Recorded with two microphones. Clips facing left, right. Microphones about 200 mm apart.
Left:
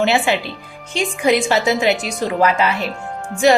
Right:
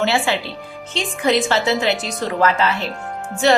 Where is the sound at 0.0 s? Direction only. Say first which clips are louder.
Left 2 dB; 15° left (ahead or behind).